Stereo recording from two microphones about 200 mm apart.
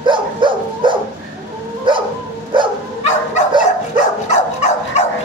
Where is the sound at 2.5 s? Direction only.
25° right (ahead or behind).